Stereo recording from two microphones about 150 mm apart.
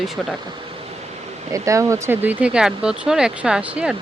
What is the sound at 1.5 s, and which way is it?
Speech, 20° right (ahead or behind).